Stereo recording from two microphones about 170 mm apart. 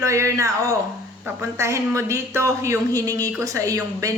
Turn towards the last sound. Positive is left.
turn(degrees=-20)  # may be behind; listen again after turning